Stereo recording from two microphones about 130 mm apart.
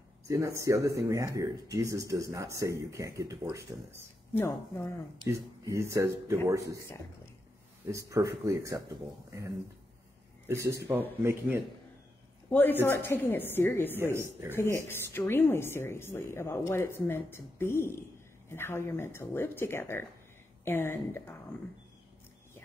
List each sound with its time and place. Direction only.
0.3 s speech: 20° right (ahead or behind)
4.3 s a woman's voice: 20° left (ahead or behind)
5.3 s speech: 20° right (ahead or behind)
7.9 s speech: 25° right (ahead or behind)
10.4 s speech: 20° right (ahead or behind)
12.4 s a woman's voice: 15° left (ahead or behind)
14.1 s speech: 20° right (ahead or behind)
14.6 s a woman's voice: 20° left (ahead or behind)